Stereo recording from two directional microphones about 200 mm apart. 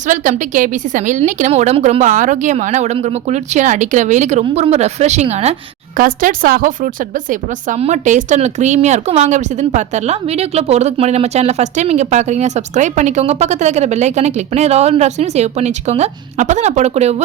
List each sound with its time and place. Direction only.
0.1 s speech: 40° right (ahead or behind)
6.0 s speech: 45° right (ahead or behind)